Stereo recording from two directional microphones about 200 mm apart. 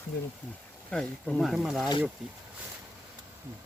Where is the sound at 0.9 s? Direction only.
5° left (ahead or behind).